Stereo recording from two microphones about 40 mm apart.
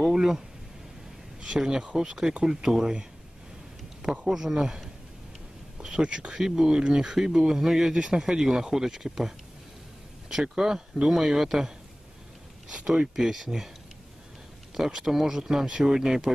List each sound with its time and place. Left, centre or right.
0.1 s a sound: centre
1.6 s speech: centre
4.2 s speech: centre
10.4 s speech: centre
13.1 s speech: centre
14.7 s speech: centre